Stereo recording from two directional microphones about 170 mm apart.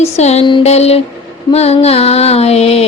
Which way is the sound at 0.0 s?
40° left (ahead or behind).